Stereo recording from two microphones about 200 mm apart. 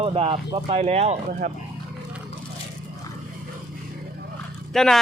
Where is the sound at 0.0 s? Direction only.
30° right (ahead or behind).